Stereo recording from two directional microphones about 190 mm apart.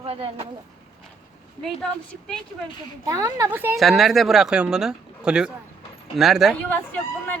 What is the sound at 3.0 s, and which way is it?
A woman's voice, 15° right (ahead or behind).